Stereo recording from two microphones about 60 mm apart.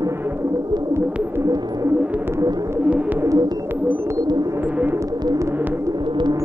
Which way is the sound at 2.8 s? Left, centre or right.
Right.